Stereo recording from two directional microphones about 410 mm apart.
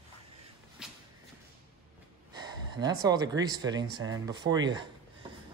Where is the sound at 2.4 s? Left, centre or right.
Centre.